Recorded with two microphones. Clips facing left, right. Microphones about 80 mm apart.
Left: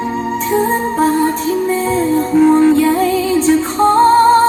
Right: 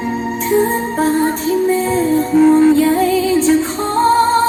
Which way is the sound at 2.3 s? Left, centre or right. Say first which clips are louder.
Even; centre.